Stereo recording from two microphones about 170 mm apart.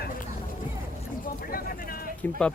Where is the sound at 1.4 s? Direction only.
60° left (ahead or behind).